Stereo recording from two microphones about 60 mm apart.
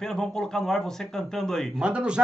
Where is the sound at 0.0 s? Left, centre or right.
Centre.